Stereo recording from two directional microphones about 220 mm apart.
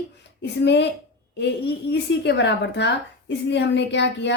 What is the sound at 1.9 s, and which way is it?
A woman's voice, 50° left (ahead or behind).